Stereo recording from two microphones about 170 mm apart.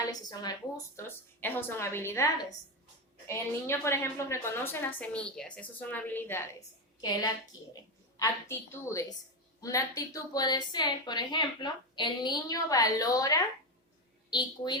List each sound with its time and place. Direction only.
0.0 s a woman's voice: 25° left (ahead or behind)